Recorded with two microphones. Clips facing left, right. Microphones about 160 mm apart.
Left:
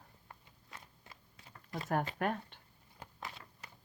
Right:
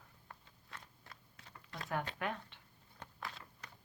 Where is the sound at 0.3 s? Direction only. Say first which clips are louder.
Right 1 dB; 15° left (ahead or behind).